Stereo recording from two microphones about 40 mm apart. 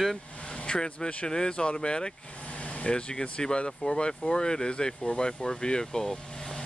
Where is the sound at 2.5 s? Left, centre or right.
Left.